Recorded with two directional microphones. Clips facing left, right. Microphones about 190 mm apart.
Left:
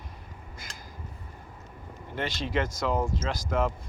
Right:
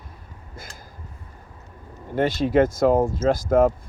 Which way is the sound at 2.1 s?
50° right (ahead or behind).